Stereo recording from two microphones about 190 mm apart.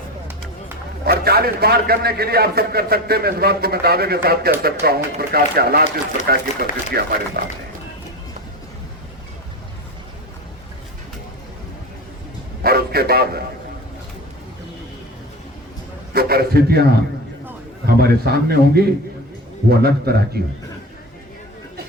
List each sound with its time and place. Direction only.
1.0 s a man's voice: 55° right (ahead or behind)
12.6 s a man's voice: 55° right (ahead or behind)
16.1 s a man's voice: 55° right (ahead or behind)
17.8 s a man's voice: 55° right (ahead or behind)